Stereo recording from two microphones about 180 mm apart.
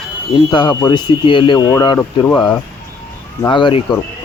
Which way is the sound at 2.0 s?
10° left (ahead or behind).